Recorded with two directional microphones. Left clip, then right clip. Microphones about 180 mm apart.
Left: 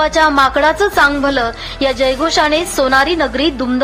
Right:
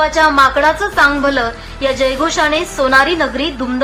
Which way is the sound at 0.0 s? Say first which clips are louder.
Right 1 dB; 40° left (ahead or behind).